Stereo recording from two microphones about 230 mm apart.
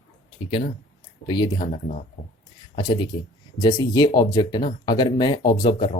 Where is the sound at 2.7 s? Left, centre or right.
Left.